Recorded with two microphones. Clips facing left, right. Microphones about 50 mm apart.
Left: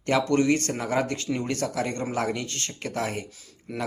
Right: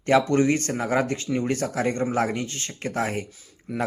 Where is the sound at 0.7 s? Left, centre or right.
Right.